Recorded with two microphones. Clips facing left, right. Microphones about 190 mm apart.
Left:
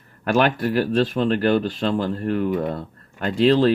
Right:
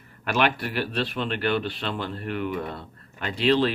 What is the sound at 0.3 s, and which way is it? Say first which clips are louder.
Speech: left 6 dB; 50° left (ahead or behind).